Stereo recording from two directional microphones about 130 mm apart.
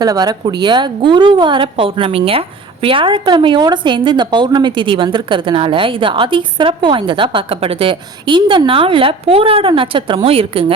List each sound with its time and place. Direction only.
0.0 s a woman's voice: 30° right (ahead or behind)